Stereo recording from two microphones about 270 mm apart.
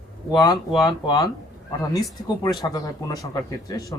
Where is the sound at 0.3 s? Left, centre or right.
Centre.